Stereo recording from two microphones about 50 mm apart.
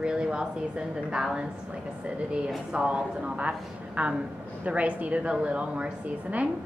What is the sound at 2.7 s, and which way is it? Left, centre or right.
A woman's voice, right.